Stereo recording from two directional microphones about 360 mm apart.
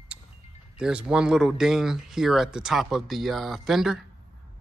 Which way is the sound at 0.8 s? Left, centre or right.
Centre.